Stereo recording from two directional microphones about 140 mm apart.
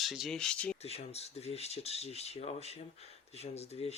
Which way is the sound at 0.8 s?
50° left (ahead or behind).